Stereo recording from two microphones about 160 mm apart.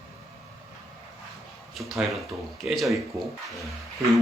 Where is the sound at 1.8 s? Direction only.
Centre (ahead or behind).